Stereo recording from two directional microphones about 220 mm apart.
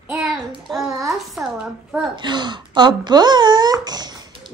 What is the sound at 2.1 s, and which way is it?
Speech, 20° right (ahead or behind).